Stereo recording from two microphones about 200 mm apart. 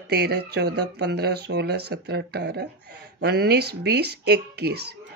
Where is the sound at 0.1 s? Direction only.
55° right (ahead or behind).